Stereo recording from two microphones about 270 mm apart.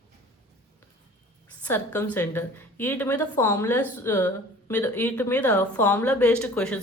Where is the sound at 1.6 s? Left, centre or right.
Centre.